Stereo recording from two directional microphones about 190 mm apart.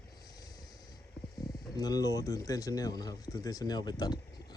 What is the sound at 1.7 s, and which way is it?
Speech, 20° left (ahead or behind).